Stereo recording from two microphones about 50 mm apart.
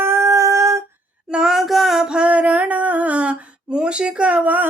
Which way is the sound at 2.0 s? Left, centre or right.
Centre.